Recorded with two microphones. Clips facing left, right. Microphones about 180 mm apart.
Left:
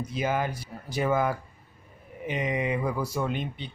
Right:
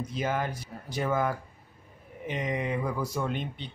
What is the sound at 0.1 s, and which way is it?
Speech, 10° left (ahead or behind).